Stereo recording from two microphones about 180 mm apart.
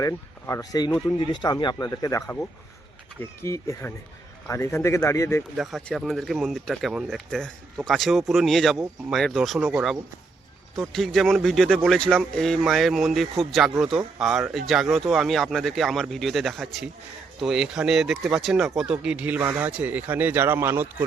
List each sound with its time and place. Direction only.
0.0 s speech: 15° left (ahead or behind)
5.5 s speech: centre (ahead or behind)